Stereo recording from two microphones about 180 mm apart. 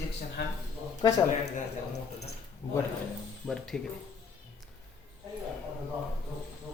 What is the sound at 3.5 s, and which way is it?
Speech, 5° left (ahead or behind).